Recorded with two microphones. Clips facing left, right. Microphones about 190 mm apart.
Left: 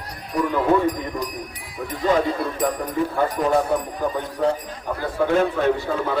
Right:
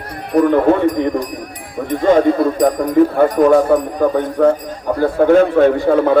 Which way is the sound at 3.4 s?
55° right (ahead or behind).